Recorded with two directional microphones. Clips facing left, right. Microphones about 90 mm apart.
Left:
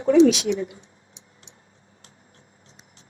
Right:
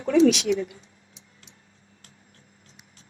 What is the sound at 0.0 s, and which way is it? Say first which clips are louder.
Speech: left 3 dB; 30° left (ahead or behind).